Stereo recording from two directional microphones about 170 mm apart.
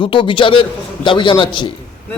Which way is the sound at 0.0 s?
30° left (ahead or behind).